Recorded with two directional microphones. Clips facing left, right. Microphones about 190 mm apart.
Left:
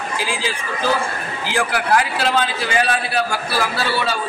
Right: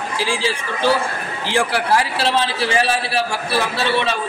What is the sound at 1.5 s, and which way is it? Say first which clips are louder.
A man's voice: right 1 dB; 30° right (ahead or behind).